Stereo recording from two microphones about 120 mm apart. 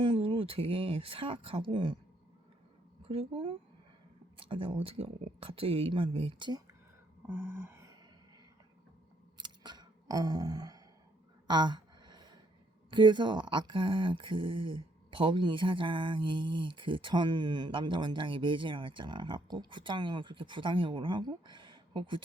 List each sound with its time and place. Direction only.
0.0 s speech: 45° right (ahead or behind)
3.1 s speech: 50° right (ahead or behind)
7.3 s a sound: 20° right (ahead or behind)
9.4 s scissors: 35° right (ahead or behind)
11.4 s a sound: 40° right (ahead or behind)
12.9 s speech: 40° right (ahead or behind)